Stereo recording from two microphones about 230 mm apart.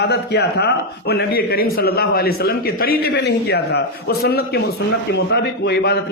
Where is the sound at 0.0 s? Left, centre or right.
Left.